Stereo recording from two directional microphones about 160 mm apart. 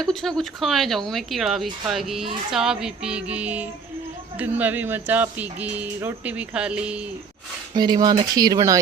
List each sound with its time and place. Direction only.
0.0 s speech: centre (ahead or behind)
7.8 s speech: 25° right (ahead or behind)